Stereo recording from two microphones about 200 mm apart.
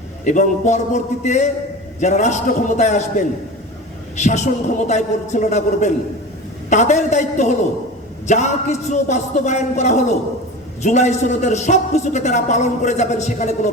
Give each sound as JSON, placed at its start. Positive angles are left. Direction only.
{"t": 0.3, "sound": "a man's voice", "side_deg": 40}